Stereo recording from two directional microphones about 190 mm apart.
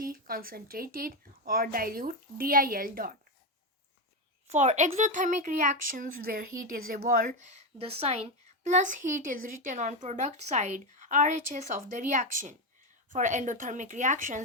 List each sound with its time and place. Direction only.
0.0 s a woman's voice: 50° right (ahead or behind)
4.4 s a woman's voice: 35° right (ahead or behind)
7.8 s a woman's voice: 30° right (ahead or behind)